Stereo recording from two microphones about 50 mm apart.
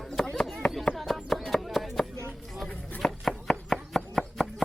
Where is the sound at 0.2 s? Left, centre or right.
Centre.